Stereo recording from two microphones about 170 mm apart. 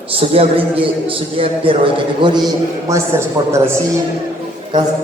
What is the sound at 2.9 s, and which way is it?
Speech, 15° right (ahead or behind).